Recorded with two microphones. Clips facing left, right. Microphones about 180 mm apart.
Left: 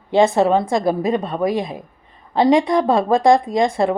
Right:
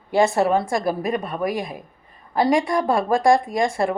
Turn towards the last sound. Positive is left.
turn(degrees=20)  # may be behind; listen again after turning